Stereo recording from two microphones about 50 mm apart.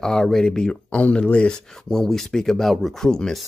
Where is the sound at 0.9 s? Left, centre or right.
Left.